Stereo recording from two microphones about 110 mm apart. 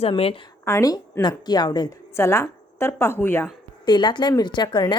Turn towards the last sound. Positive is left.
turn(degrees=45)  # may be behind; listen again after turning